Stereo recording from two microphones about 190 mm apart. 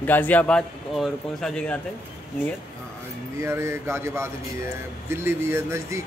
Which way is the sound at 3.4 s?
15° right (ahead or behind).